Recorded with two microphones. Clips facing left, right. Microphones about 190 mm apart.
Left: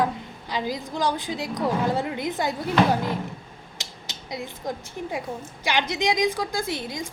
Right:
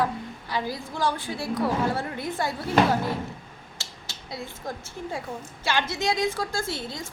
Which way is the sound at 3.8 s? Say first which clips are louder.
Left 4 dB; 20° left (ahead or behind).